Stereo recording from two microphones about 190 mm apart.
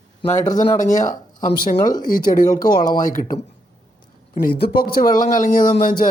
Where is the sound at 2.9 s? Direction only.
45° left (ahead or behind).